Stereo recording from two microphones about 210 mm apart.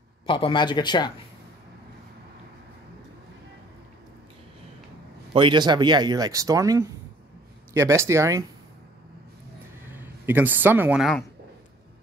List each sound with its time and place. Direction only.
0.3 s speech: 25° left (ahead or behind)
5.3 s speech: 20° right (ahead or behind)
9.9 s speech: 10° right (ahead or behind)